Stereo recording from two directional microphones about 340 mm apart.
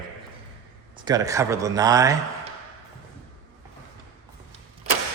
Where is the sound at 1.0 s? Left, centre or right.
Centre.